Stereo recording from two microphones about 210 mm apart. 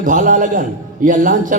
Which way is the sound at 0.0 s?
40° right (ahead or behind).